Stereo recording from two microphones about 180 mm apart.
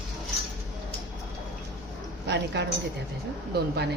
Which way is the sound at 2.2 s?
70° right (ahead or behind).